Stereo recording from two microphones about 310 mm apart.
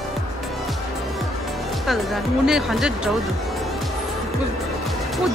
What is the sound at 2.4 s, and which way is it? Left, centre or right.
Speech, centre.